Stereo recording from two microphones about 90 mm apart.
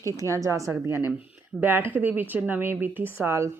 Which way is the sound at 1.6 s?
20° right (ahead or behind).